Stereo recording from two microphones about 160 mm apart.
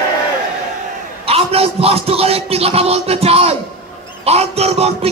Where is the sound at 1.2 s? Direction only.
40° right (ahead or behind).